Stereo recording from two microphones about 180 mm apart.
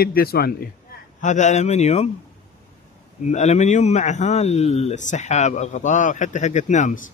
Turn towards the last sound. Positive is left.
turn(degrees=45)  # may be behind; listen again after turning